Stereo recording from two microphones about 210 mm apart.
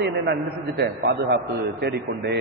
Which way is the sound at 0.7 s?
50° right (ahead or behind).